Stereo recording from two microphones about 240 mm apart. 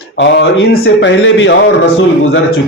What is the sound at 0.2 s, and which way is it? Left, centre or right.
A man's voice, left.